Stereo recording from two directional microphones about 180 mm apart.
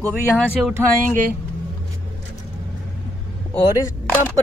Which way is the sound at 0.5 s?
10° right (ahead or behind).